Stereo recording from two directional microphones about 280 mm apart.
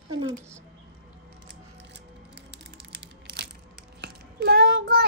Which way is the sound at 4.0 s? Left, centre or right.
Right.